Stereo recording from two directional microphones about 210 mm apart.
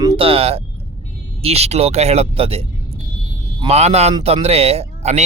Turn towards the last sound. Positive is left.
turn(degrees=-30)  # may be behind; listen again after turning